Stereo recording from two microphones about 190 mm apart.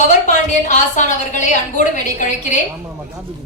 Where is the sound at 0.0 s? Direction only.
40° left (ahead or behind).